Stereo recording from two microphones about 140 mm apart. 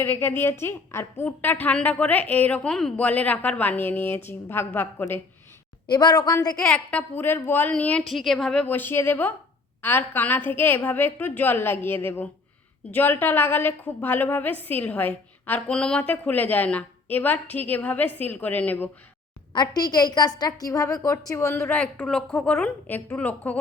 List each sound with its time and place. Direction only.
0.0 s a woman's voice: 15° left (ahead or behind)
5.9 s a woman's voice: 30° left (ahead or behind)
6.6 s a woman's voice: 5° left (ahead or behind)
8.6 s a woman's voice: 15° left (ahead or behind)
19.5 s a woman's voice: 30° left (ahead or behind); by 23.6 s 10° left (ahead or behind)